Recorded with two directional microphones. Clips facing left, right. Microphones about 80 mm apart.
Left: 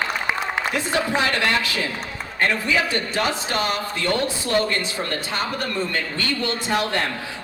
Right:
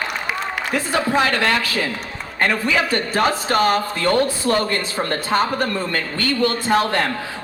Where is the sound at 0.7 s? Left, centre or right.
Right.